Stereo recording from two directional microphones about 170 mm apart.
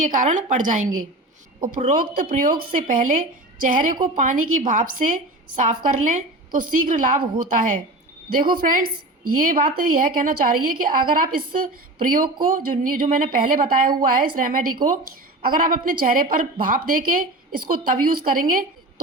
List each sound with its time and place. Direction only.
0.0 s a woman's voice: 45° right (ahead or behind)
2.1 s a woman's voice: 55° right (ahead or behind)